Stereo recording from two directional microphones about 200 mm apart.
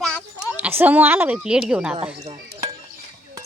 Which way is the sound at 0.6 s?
10° right (ahead or behind).